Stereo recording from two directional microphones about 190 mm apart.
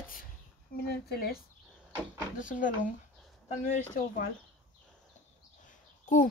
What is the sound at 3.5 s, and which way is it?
Speech, 45° left (ahead or behind).